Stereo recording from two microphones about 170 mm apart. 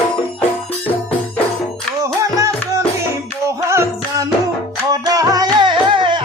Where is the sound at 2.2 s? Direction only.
20° right (ahead or behind).